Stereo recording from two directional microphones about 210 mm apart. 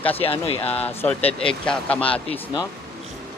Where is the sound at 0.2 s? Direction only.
25° left (ahead or behind).